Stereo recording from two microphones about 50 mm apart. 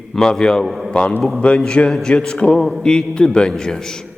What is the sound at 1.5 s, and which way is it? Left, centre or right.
A man's voice, centre.